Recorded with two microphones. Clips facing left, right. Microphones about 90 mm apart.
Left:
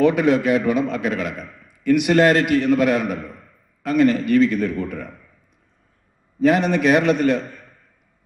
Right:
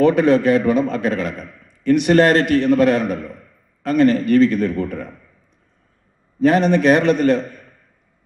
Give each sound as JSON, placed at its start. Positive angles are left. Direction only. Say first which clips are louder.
{"t": 0.0, "sound": "a man's voice", "louder": "right 3 dB", "side_deg": -35}
{"t": 6.4, "sound": "a man's voice", "louder": "right 3 dB", "side_deg": -35}